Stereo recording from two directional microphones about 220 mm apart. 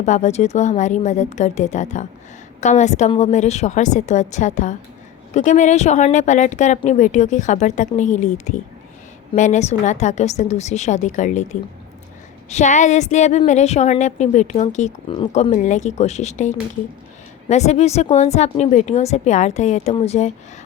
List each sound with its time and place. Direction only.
0.0 s a woman's voice: 30° left (ahead or behind)
12.5 s a woman's voice: 35° left (ahead or behind)